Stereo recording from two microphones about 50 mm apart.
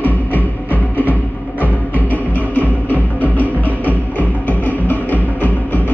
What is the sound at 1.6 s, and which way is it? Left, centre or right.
Music, left.